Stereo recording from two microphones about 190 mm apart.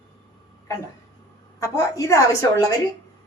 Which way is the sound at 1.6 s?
15° left (ahead or behind).